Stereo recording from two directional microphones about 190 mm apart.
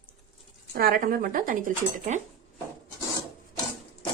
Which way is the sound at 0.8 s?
50° right (ahead or behind).